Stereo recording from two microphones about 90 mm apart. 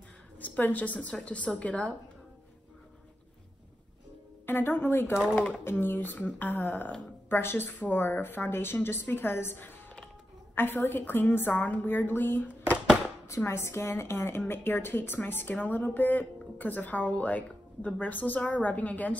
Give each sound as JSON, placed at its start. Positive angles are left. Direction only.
{"t": 0.4, "sound": "a woman's voice", "side_deg": 20}
{"t": 4.5, "sound": "a woman's voice", "side_deg": 25}